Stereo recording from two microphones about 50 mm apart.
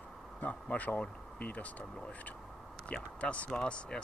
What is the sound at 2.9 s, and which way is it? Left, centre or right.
Speech, left.